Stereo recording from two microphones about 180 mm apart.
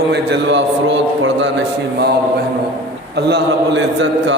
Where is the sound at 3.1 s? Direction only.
65° right (ahead or behind).